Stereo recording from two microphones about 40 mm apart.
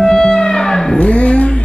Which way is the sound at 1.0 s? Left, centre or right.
Left.